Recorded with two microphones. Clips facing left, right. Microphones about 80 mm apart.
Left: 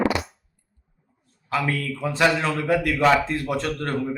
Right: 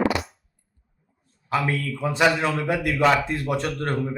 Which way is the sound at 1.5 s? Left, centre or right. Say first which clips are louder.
Even; right.